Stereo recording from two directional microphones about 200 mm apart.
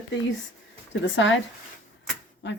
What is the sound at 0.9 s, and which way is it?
Speech, 70° left (ahead or behind).